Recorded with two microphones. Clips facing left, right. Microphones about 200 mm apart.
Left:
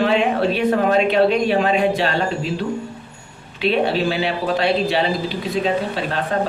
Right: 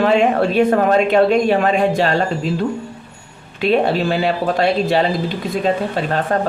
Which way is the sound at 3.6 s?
45° right (ahead or behind).